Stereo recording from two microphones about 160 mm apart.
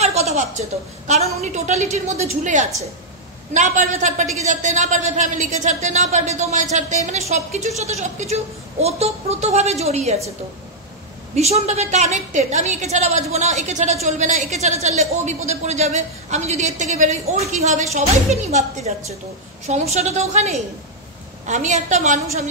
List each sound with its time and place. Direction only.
0.0 s a woman's voice: 40° right (ahead or behind)
11.3 s a woman's voice: 40° right (ahead or behind)